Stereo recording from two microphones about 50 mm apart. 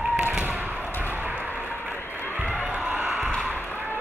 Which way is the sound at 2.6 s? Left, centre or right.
Right.